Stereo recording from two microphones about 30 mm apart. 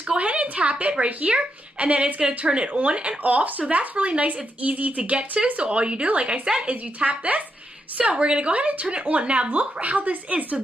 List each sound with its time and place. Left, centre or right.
0.2 s a woman's voice: right
3.3 s speech: right
3.7 s speech: right
5.6 s a woman's voice: right
6.7 s speech: right
8.0 s a woman's voice: right